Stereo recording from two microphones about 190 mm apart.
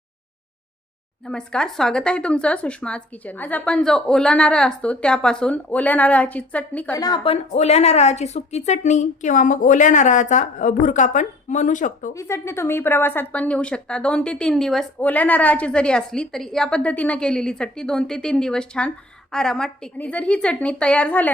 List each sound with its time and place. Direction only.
1.3 s speech: 5° left (ahead or behind)
7.0 s speech: 20° left (ahead or behind)
7.5 s a woman's voice: 35° left (ahead or behind)
12.1 s a woman's voice: 15° left (ahead or behind)